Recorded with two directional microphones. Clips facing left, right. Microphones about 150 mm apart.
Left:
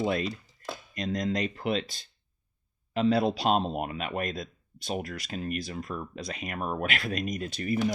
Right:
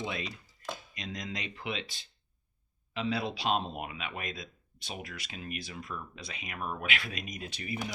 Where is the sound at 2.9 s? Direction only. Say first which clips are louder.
Left 8 dB; 40° left (ahead or behind).